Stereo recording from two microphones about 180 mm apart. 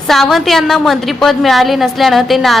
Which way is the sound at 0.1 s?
Centre (ahead or behind).